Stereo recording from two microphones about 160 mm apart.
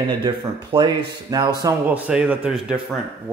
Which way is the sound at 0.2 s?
30° right (ahead or behind).